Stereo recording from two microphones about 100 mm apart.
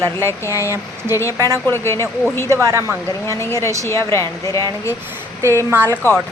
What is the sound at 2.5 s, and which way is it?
Speech, 30° right (ahead or behind).